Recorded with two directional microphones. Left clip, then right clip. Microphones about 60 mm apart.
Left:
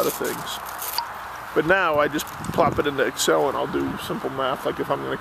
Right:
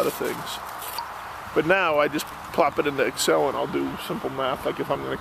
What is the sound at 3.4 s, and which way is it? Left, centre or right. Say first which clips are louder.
Speech: left 1 dB; left.